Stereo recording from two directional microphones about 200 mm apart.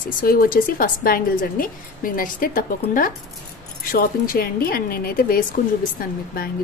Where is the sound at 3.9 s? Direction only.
45° left (ahead or behind).